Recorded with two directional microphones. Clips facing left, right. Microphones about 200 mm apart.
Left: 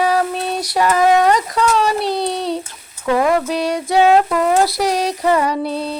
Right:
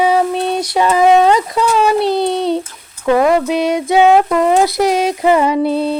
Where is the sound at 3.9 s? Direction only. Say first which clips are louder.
Right 2 dB; 20° right (ahead or behind).